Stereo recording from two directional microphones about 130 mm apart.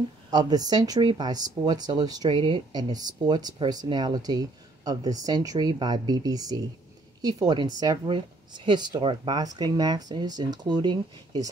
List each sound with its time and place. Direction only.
0.3 s speech: 30° right (ahead or behind)